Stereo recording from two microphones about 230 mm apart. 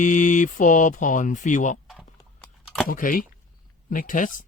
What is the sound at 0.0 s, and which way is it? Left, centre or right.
Speech, left.